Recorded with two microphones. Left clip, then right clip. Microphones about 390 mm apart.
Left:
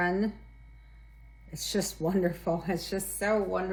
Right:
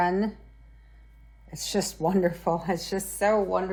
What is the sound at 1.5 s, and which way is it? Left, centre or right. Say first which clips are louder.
Speech: right 3 dB; centre.